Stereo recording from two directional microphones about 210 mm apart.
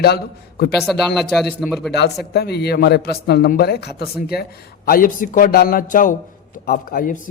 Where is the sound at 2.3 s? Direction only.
50° left (ahead or behind).